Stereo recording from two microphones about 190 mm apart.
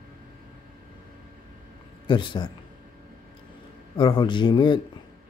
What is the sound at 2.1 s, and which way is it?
Speech, 25° left (ahead or behind).